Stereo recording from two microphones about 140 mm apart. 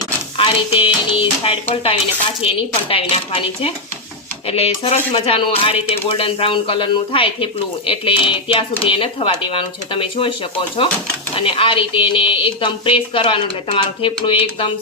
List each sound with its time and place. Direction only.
0.3 s speech: 40° left (ahead or behind)
11.3 s speech: 40° left (ahead or behind)